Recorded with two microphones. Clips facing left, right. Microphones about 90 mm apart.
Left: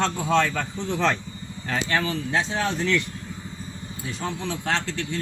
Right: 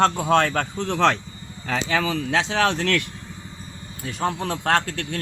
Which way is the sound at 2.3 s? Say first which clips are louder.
Right 4 dB; 85° right.